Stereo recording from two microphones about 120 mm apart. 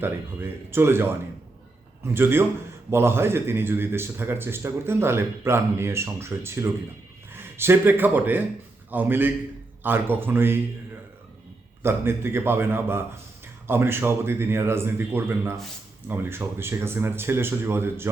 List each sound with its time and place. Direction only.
0.7 s a man's voice: 20° right (ahead or behind)
2.1 s a man's voice: 20° right (ahead or behind)
11.8 s a man's voice: 20° right (ahead or behind)